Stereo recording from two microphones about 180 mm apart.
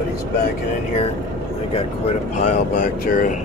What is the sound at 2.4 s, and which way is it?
Speech, 40° left (ahead or behind).